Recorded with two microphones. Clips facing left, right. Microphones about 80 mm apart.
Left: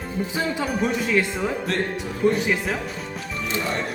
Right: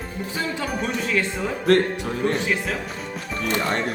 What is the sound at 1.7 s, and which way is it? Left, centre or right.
Speech, right.